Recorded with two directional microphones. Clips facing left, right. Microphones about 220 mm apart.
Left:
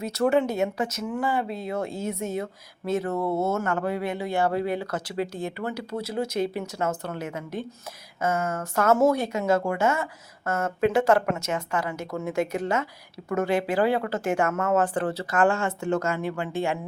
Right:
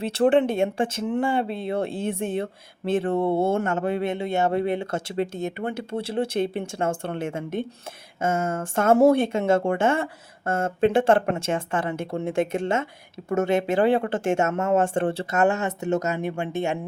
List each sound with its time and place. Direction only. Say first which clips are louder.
0.0 s speech: right 3 dB; 30° right (ahead or behind)